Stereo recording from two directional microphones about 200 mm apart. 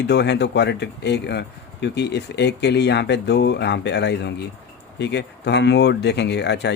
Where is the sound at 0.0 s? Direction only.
60° left (ahead or behind).